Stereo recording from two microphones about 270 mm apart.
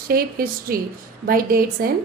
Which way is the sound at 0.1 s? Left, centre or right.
Right.